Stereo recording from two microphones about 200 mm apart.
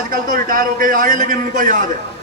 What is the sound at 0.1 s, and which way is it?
A man's voice, 45° right (ahead or behind).